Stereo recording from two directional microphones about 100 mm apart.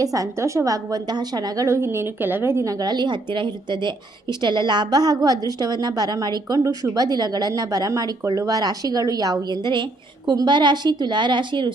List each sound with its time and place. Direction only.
0.0 s a woman's voice: 35° right (ahead or behind); by 11.7 s 50° right (ahead or behind)